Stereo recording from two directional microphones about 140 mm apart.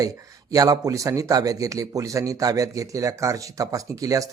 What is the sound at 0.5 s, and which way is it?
A man's voice, 25° right (ahead or behind).